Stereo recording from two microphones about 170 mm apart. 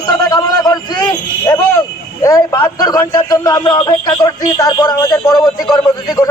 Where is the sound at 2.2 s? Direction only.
20° left (ahead or behind).